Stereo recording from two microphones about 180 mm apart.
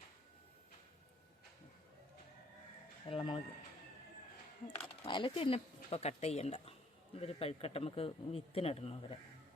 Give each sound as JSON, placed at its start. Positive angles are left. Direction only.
{"t": 3.1, "sound": "speech", "side_deg": 25}
{"t": 4.8, "sound": "speech", "side_deg": 30}